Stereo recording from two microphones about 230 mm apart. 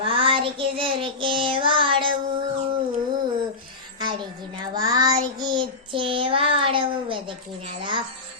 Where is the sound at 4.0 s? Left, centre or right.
Centre.